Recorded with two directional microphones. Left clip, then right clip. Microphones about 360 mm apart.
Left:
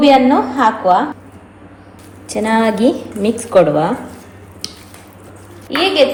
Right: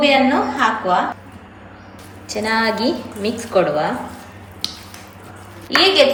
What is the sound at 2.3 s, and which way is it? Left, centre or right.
Speech, centre.